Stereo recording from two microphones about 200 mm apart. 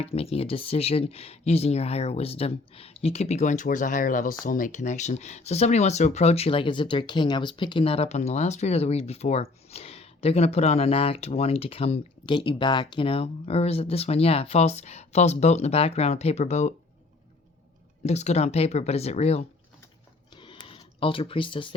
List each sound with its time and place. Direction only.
0.0 s speech: 30° left (ahead or behind)
18.0 s speech: 35° left (ahead or behind)
20.3 s a sound: 25° left (ahead or behind)